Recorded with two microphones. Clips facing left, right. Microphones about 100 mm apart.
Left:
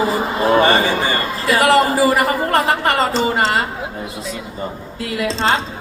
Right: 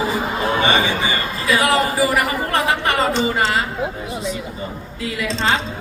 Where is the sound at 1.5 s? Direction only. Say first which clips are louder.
Left 3 dB; 35° left (ahead or behind).